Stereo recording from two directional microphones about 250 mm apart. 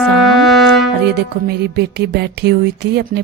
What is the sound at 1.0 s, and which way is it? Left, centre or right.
Music, right.